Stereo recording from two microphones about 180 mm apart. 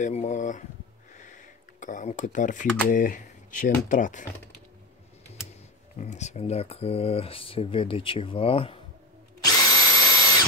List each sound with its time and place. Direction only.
0.0 s speech: 40° left (ahead or behind)
1.1 s a sound: 45° left (ahead or behind)
2.9 s speech: 50° left (ahead or behind)
5.9 s speech: 40° left (ahead or behind)
9.4 s drill: 20° left (ahead or behind)